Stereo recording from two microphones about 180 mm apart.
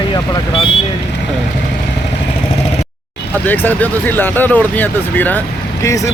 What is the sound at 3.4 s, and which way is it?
Speech, 10° left (ahead or behind).